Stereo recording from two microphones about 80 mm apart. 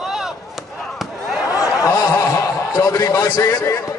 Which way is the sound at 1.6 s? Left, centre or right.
Left.